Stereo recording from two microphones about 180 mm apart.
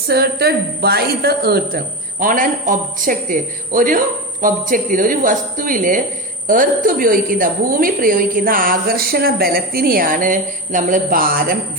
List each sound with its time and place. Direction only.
0.1 s speech: 60° right (ahead or behind)